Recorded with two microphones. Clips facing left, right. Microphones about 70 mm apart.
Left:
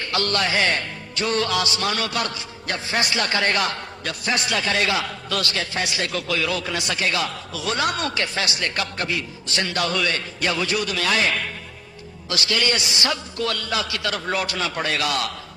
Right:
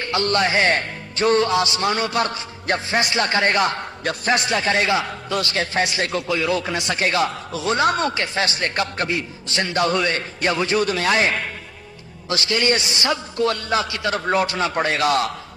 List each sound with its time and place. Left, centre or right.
0.0 s a man's voice: right